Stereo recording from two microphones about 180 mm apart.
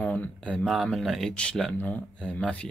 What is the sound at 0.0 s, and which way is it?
Speech, 5° left (ahead or behind).